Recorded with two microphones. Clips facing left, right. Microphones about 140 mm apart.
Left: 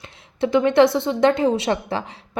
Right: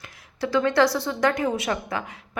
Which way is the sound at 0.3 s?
20° left (ahead or behind).